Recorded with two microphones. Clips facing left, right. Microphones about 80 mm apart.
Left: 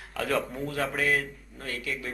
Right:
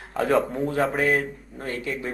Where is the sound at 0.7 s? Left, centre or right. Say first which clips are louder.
Right 5 dB; right.